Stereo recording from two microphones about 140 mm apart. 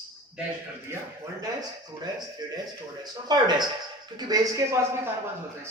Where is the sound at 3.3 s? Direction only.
30° right (ahead or behind).